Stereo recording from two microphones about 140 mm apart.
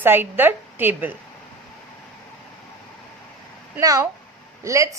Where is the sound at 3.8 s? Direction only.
25° right (ahead or behind).